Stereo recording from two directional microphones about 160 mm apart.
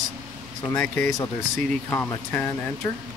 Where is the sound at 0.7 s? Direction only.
5° left (ahead or behind).